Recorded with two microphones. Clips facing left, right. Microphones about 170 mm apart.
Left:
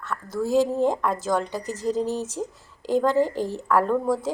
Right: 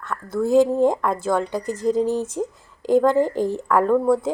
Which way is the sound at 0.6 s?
15° right (ahead or behind).